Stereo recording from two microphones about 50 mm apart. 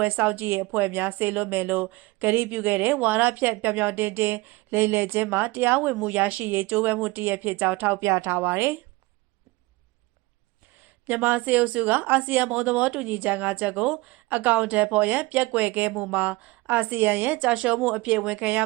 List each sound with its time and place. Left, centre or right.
0.2 s speech: right
8.0 s a woman's voice: right
8.4 s speech: right
11.0 s speech: right
13.1 s speech: right
13.7 s speech: centre; by 17.5 s right
17.5 s speech: right
18.2 s speech: right